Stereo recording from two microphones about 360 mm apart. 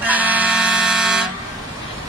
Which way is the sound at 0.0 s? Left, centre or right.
Centre.